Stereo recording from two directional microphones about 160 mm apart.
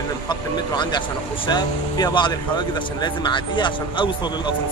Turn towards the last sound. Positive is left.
turn(degrees=30)  # may be behind; listen again after turning